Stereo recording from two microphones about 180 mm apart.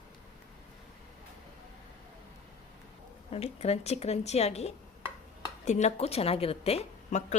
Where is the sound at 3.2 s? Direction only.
35° left (ahead or behind).